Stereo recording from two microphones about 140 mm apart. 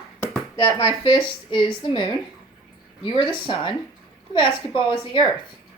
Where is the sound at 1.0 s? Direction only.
35° left (ahead or behind).